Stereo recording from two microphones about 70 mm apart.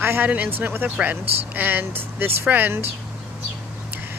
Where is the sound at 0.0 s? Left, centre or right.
Right.